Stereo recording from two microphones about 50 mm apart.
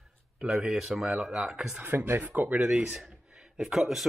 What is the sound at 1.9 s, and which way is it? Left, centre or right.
Speech, right.